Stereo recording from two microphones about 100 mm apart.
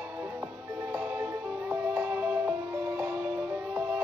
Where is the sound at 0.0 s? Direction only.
20° right (ahead or behind).